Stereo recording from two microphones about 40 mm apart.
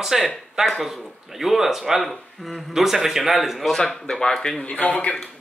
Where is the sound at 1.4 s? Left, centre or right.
Centre.